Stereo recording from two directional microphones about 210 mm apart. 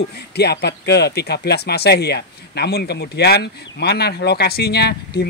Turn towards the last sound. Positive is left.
turn(degrees=50)  # may be behind; listen again after turning